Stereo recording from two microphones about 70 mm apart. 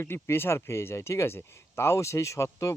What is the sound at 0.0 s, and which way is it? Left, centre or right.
Speech, left.